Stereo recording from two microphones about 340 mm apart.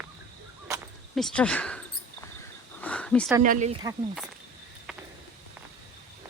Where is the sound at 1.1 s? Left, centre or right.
Centre.